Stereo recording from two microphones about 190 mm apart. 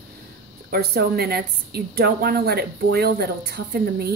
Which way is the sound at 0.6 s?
55° right (ahead or behind).